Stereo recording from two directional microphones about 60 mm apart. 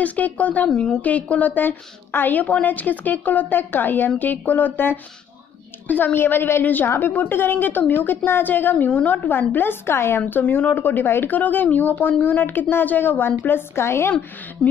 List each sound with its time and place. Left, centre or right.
0.0 s a woman's voice: left
0.7 s a woman's voice: centre
1.0 s a woman's voice: left
10.4 s speech: left